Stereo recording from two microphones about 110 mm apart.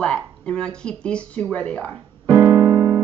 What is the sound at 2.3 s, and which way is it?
Keyboard, 25° right (ahead or behind).